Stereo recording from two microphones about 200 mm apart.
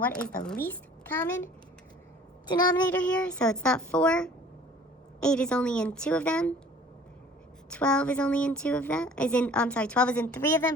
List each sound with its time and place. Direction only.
0.0 s a child's voice: 5° left (ahead or behind)
2.5 s speech: 20° left (ahead or behind)
2.9 s a woman's voice: 5° left (ahead or behind)
7.7 s a woman's voice: 5° left (ahead or behind)